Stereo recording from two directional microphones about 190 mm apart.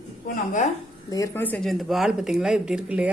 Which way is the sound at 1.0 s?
15° left (ahead or behind).